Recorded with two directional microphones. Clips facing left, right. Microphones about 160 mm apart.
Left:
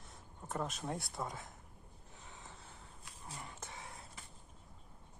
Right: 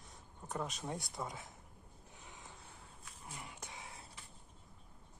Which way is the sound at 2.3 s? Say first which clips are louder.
Left 1 dB; 20° right (ahead or behind).